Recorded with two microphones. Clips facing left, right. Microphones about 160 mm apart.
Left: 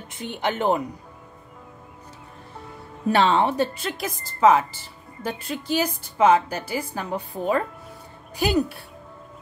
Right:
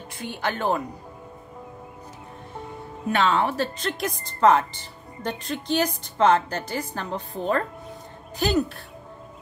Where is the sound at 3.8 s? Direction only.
5° left (ahead or behind).